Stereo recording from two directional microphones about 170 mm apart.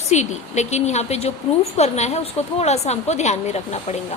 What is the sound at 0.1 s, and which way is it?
A woman's voice, 40° left (ahead or behind).